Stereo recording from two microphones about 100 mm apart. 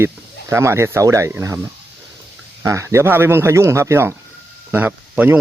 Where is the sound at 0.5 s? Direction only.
25° right (ahead or behind).